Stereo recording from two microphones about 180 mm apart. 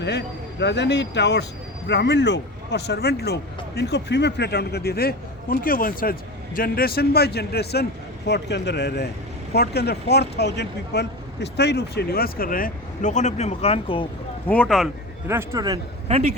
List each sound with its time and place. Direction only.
0.0 s speech: 70° left (ahead or behind); by 14.1 s 30° left (ahead or behind)
14.4 s speech: 5° left (ahead or behind)
15.3 s speech: 15° right (ahead or behind)
16.0 s a man's voice: 35° right (ahead or behind)